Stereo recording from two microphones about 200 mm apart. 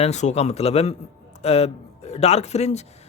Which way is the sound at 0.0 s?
35° left (ahead or behind).